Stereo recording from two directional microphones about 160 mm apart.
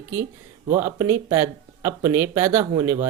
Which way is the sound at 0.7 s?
15° right (ahead or behind).